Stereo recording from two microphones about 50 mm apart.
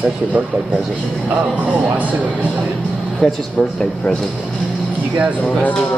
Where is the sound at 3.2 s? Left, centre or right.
Centre.